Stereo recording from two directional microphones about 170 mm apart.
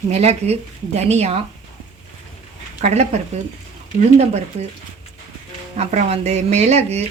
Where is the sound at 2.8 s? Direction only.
40° right (ahead or behind).